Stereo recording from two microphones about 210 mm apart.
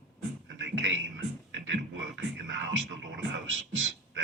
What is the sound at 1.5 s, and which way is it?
Music, 60° right (ahead or behind).